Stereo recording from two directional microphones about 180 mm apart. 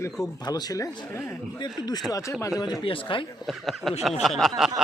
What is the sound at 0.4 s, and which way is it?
Speech, 20° left (ahead or behind).